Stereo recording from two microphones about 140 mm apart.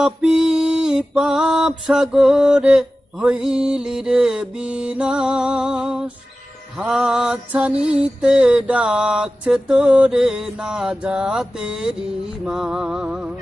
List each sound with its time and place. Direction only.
0.0 s mantra: 5° right (ahead or behind)
6.7 s music: 5° right (ahead or behind)
12.5 s mantra: 5° right (ahead or behind)